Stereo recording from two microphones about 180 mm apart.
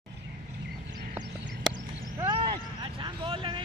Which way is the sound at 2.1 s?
25° right (ahead or behind).